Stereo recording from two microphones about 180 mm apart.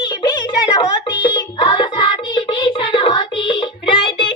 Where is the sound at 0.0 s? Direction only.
25° left (ahead or behind).